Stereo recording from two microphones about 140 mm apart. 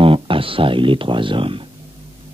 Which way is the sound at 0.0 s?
40° right (ahead or behind).